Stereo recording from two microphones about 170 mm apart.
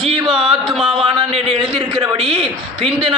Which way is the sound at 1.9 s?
35° right (ahead or behind).